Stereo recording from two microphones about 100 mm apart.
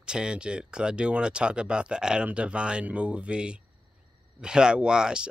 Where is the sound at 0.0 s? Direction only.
10° right (ahead or behind).